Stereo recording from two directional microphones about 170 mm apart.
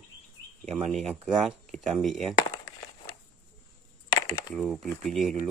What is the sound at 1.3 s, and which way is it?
Speech, centre (ahead or behind).